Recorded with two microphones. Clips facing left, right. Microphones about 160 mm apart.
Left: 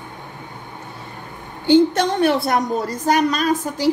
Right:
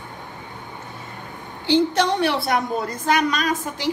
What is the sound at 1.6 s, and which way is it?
A woman's voice, 50° left (ahead or behind).